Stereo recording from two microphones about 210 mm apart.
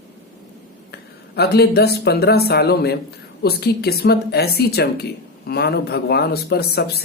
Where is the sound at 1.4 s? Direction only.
50° left (ahead or behind).